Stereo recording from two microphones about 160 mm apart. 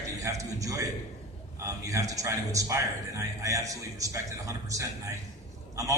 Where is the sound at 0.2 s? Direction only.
20° right (ahead or behind).